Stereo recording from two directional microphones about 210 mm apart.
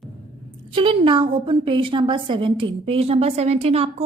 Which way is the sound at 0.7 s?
25° right (ahead or behind).